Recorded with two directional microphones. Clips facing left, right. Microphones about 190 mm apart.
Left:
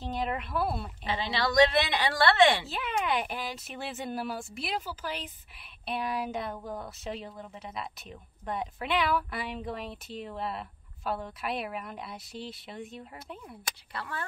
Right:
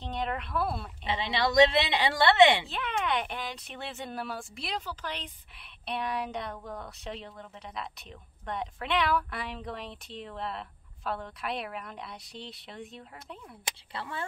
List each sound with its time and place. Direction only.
0.0 s a woman's voice: 5° left (ahead or behind)
1.0 s a woman's voice: 20° right (ahead or behind)
2.6 s a woman's voice: 5° left (ahead or behind)
13.9 s a woman's voice: 25° right (ahead or behind)